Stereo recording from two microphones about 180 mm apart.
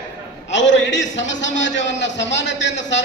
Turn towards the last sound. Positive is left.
turn(degrees=80)